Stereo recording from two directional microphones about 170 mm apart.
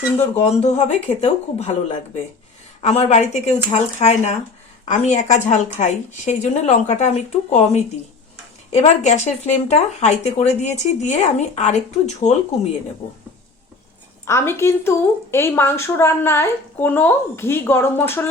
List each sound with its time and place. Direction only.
0.4 s speech: 40° left (ahead or behind)
2.8 s speech: 40° left (ahead or behind)
14.3 s speech: 15° left (ahead or behind)